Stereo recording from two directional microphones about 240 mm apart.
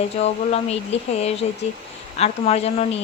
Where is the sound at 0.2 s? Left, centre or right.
Left.